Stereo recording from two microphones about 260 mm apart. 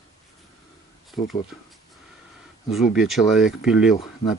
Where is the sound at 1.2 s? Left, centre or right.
Left.